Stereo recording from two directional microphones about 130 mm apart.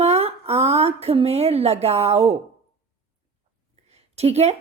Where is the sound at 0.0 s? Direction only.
50° right (ahead or behind).